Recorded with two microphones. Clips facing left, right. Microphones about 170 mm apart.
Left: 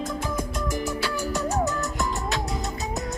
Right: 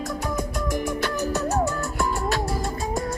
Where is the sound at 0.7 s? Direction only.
50° right (ahead or behind).